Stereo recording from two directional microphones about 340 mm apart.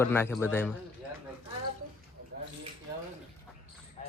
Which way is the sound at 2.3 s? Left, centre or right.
Right.